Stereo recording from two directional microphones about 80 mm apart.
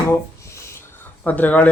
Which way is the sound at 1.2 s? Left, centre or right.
Left.